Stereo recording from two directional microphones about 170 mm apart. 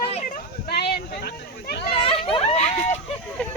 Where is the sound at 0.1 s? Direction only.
45° left (ahead or behind).